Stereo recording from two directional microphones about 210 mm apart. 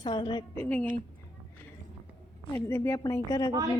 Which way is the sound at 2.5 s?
10° left (ahead or behind).